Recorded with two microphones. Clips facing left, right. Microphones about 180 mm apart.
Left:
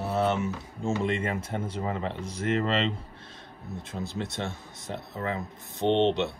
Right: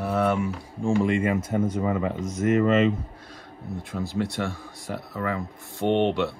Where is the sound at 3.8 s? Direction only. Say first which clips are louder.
Right 6 dB; 20° left (ahead or behind).